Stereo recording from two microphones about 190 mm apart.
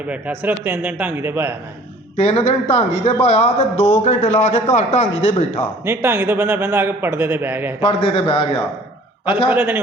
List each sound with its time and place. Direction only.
0.1 s a man's voice: 10° right (ahead or behind)
2.1 s a man's voice: 30° left (ahead or behind)
5.8 s a man's voice: 10° right (ahead or behind)
7.8 s a man's voice: 30° left (ahead or behind)
9.5 s a man's voice: 10° right (ahead or behind)